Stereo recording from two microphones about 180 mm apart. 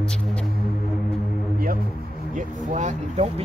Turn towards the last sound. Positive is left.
turn(degrees=-40)  # may be behind; listen again after turning